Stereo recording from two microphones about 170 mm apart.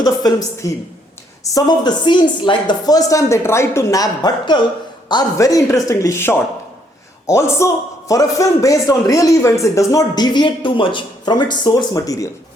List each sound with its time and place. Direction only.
0.0 s a man's voice: 20° left (ahead or behind)